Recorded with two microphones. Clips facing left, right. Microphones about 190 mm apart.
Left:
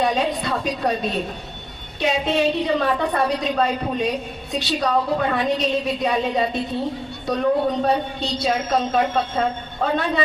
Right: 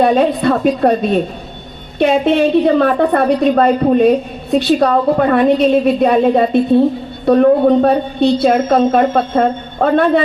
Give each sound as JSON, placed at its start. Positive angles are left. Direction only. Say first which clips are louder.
{"t": 0.0, "sound": "a woman's voice", "louder": "right 10 dB", "side_deg": -55}